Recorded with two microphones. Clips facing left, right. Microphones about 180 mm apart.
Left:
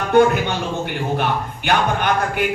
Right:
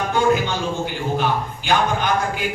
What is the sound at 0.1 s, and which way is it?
Speech, 60° left (ahead or behind).